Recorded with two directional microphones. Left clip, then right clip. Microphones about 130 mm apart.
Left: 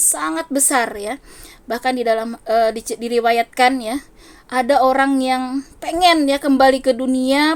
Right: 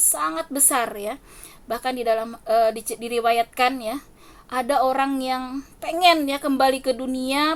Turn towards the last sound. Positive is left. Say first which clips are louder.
# left 6 dB
turn(degrees=40)  # may be behind; listen again after turning